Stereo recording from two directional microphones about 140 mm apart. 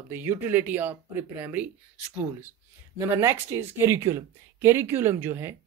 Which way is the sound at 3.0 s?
20° right (ahead or behind).